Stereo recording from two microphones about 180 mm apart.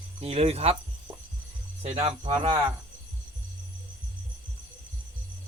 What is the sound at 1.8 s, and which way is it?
Speech, 35° right (ahead or behind).